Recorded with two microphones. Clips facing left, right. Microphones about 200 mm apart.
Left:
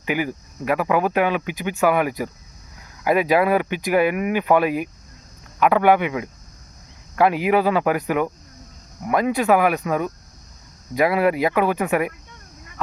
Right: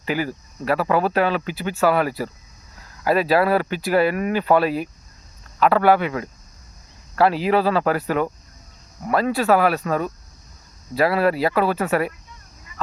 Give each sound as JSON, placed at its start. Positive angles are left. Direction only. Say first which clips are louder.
{"t": 0.0, "sound": "speech", "louder": "even", "side_deg": 15}